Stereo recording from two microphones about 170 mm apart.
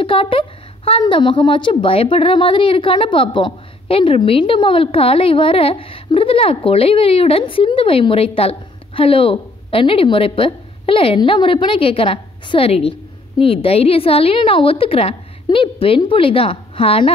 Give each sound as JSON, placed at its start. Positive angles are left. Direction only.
{"t": 0.0, "sound": "a woman's voice", "side_deg": 30}